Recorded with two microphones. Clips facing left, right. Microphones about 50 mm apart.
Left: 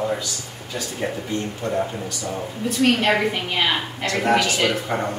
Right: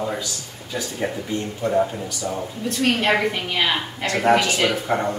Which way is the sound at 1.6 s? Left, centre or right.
Centre.